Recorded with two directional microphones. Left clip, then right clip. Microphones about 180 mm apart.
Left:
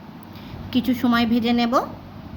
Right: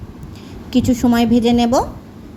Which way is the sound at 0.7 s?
20° right (ahead or behind).